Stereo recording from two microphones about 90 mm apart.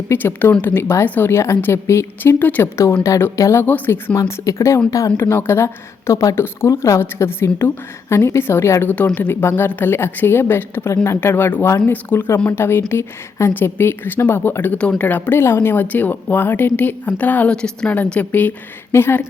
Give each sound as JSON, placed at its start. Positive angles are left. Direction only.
{"t": 0.1, "sound": "speech", "side_deg": 25}
{"t": 2.4, "sound": "speech", "side_deg": 20}
{"t": 4.2, "sound": "speech", "side_deg": 35}
{"t": 5.1, "sound": "speech", "side_deg": 25}